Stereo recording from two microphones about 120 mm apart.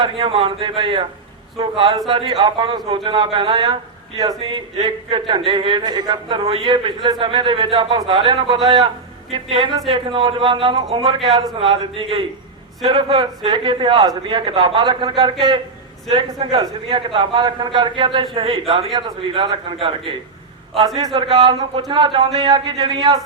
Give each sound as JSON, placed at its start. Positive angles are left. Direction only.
{"t": 0.0, "sound": "a man's voice", "side_deg": -45}
{"t": 2.0, "sound": "a man's voice", "side_deg": -45}
{"t": 20.8, "sound": "a man's voice", "side_deg": -35}